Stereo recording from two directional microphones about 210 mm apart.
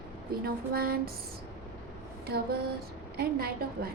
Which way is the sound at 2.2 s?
45° right (ahead or behind).